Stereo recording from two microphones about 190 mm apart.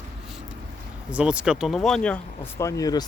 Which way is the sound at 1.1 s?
5° right (ahead or behind).